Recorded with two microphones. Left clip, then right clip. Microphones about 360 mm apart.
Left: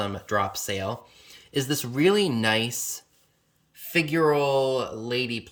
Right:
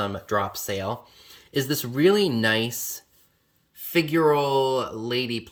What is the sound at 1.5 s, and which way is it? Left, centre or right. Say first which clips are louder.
Speech: right 1 dB; centre.